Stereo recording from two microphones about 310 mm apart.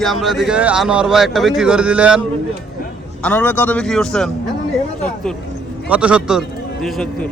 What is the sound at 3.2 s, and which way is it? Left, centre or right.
Speech, centre.